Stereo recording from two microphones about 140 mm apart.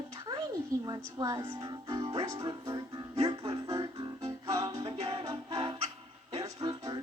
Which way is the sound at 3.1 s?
45° right (ahead or behind).